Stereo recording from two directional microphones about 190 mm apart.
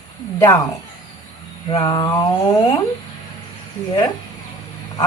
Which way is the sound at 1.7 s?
20° left (ahead or behind).